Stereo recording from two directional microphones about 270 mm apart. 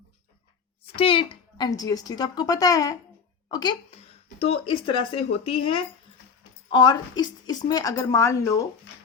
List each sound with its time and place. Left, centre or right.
0.9 s a woman's voice: left